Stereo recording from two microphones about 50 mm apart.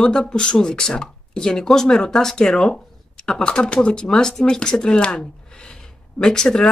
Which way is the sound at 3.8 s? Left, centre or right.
Centre.